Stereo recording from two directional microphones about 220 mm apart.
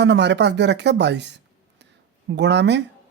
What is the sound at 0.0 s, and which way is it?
Speech, 50° right (ahead or behind).